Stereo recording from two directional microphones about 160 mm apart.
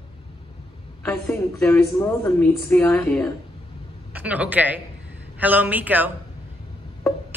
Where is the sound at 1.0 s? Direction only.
15° left (ahead or behind).